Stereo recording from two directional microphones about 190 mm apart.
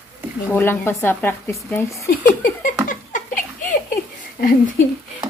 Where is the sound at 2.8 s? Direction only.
45° left (ahead or behind).